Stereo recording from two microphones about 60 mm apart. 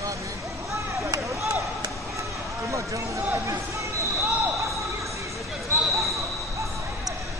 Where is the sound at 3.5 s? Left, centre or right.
Right.